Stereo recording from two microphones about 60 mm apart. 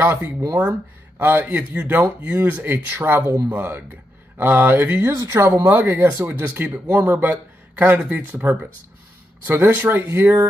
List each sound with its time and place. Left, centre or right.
0.6 s speech: right
5.1 s speech: right
5.7 s speech: right